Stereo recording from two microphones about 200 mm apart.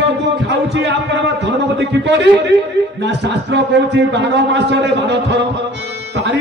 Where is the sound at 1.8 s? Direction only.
60° right (ahead or behind).